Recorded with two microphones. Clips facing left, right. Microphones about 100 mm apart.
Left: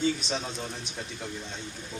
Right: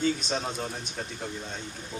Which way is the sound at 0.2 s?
45° right (ahead or behind).